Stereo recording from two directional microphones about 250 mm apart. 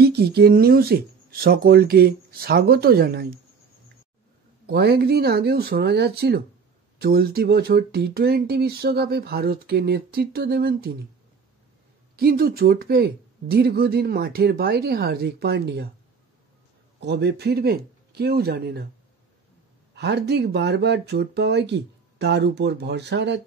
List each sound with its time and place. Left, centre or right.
0.0 s speech: right
4.6 s speech: right
12.2 s speech: right
17.0 s speech: right
19.9 s speech: right